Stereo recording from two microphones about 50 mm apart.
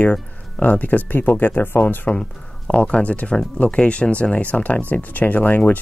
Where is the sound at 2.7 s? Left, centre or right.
Left.